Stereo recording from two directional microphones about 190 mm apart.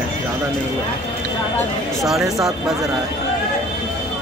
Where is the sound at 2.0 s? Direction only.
Centre (ahead or behind).